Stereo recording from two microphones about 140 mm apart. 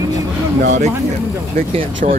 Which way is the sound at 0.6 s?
60° right (ahead or behind).